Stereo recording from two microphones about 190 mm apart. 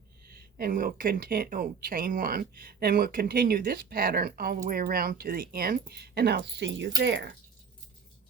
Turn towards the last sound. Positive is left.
turn(degrees=-65)  # may be behind; listen again after turning